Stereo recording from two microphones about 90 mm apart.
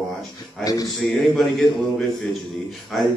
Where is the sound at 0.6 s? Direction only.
40° left (ahead or behind).